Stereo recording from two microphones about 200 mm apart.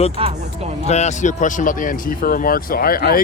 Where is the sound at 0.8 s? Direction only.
35° left (ahead or behind); by 3.1 s 50° left (ahead or behind).